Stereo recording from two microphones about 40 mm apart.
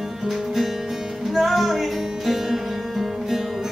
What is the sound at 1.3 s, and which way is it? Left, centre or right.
Music, centre.